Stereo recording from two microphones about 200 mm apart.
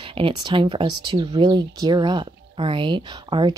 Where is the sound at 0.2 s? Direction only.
25° right (ahead or behind).